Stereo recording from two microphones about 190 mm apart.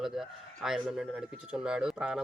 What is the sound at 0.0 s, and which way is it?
A man's voice, centre (ahead or behind).